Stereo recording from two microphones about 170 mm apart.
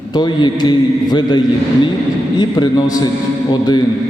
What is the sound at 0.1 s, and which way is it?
Mantra, 25° left (ahead or behind).